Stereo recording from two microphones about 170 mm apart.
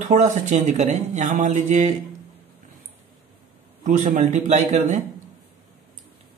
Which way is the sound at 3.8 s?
50° right (ahead or behind).